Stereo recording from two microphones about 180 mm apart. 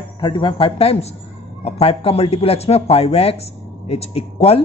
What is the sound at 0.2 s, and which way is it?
Speech, 25° left (ahead or behind).